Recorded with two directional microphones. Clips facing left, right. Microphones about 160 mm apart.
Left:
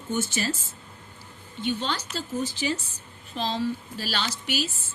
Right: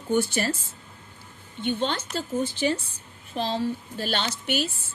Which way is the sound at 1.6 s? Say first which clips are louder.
Right 2 dB; 55° right (ahead or behind).